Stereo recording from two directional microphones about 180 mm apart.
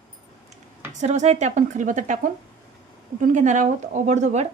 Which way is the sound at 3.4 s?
40° right (ahead or behind).